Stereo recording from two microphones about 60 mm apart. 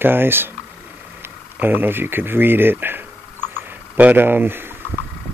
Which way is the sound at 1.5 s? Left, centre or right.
Right.